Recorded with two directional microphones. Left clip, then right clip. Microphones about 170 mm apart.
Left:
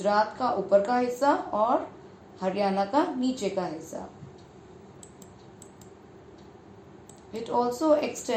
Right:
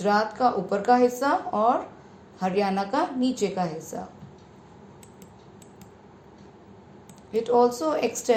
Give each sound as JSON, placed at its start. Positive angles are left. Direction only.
{"t": 0.0, "sound": "speech", "side_deg": -35}
{"t": 7.4, "sound": "speech", "side_deg": -35}